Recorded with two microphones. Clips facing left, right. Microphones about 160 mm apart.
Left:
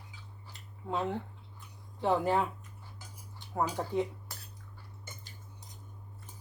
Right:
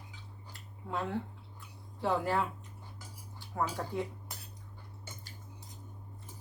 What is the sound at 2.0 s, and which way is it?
A woman's voice, 20° left (ahead or behind).